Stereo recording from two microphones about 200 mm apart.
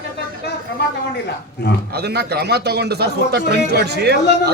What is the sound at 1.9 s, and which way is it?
Speech, 55° right (ahead or behind).